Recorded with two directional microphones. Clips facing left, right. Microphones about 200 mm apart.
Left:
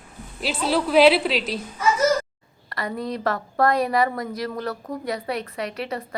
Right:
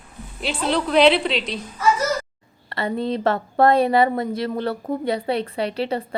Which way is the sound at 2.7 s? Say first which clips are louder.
Right 5 dB; 25° right (ahead or behind).